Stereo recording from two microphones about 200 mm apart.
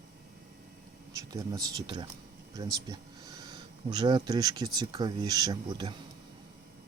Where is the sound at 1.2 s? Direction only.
20° right (ahead or behind).